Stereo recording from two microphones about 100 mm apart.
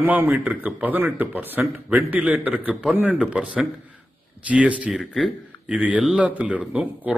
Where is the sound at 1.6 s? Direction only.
5° right (ahead or behind).